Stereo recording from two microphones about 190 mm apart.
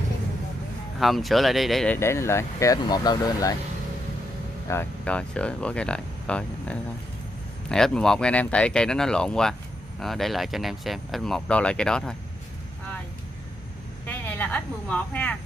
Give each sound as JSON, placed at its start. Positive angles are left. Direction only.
{"t": 0.9, "sound": "speech", "side_deg": 0}
{"t": 2.0, "sound": "speech", "side_deg": 15}
{"t": 4.6, "sound": "speech", "side_deg": 10}
{"t": 14.0, "sound": "speech", "side_deg": 10}